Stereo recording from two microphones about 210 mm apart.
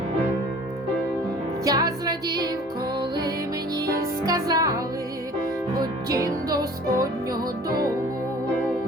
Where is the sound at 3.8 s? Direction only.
15° right (ahead or behind).